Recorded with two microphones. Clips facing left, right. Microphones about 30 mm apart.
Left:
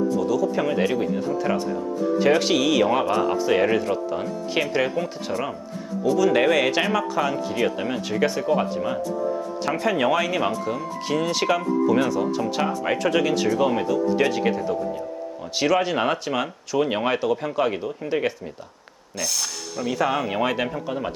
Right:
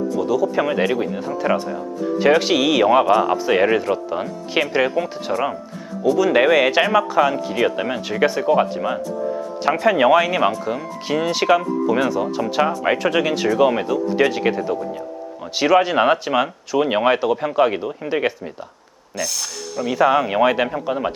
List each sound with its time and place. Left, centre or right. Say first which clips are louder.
0.2 s speech: right 3 dB; centre
19.1 s speech: right 2 dB; centre
20.0 s speech: right 8 dB; centre